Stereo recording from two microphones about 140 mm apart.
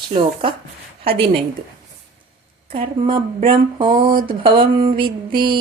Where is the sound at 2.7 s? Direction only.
40° right (ahead or behind).